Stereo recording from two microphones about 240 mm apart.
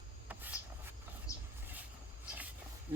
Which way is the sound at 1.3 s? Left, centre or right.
Centre.